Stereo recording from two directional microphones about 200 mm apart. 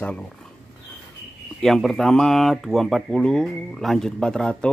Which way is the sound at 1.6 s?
Centre (ahead or behind).